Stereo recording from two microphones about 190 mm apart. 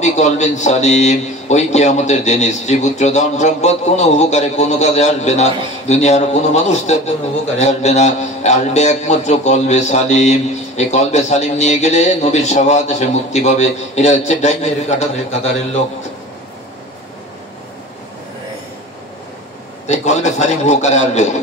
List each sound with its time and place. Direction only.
0.0 s a man's voice: 35° left (ahead or behind)
19.9 s a man's voice: 35° left (ahead or behind)